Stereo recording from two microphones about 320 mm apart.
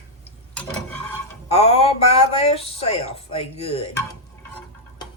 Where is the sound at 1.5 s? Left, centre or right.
Centre.